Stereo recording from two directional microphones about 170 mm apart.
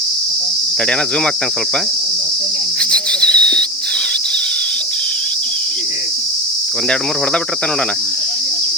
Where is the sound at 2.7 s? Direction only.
5° left (ahead or behind).